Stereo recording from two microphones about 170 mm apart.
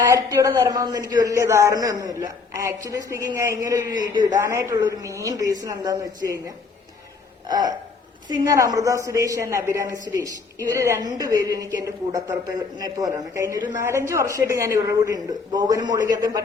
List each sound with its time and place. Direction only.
0.1 s a woman's voice: 20° right (ahead or behind)
7.4 s a sound: 25° right (ahead or behind)
8.3 s a woman's voice: 20° right (ahead or behind)